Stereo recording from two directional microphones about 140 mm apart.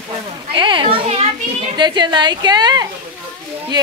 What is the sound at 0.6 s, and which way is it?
Speech, 35° right (ahead or behind).